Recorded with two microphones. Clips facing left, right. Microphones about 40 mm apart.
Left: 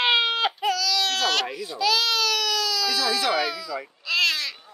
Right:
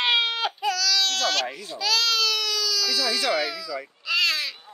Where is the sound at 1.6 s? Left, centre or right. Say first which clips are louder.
Left 2 dB; centre.